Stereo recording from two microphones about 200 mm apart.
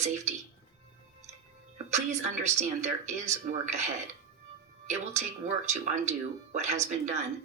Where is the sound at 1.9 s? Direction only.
35° right (ahead or behind).